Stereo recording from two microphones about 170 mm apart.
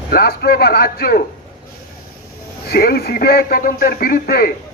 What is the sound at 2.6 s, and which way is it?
Speech, 65° left (ahead or behind).